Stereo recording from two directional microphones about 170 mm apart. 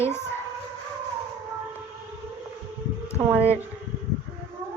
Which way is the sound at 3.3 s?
10° right (ahead or behind).